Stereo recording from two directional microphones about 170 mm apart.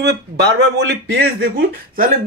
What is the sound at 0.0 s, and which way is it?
Speech, 85° right.